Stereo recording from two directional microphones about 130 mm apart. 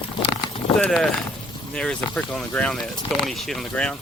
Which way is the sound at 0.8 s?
5° left (ahead or behind).